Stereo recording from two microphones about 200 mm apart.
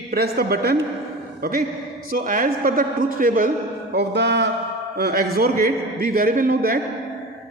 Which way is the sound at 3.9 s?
55° right (ahead or behind).